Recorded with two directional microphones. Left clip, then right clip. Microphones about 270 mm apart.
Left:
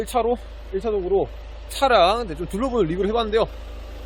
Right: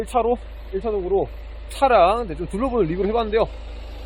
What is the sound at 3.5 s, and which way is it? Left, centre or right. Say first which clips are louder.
Vehicle: even; left.